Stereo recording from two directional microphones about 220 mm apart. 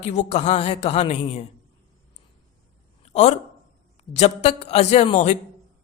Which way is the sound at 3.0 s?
30° left (ahead or behind).